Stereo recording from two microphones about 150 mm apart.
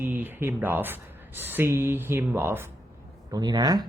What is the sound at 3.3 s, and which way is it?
Speech, 25° right (ahead or behind).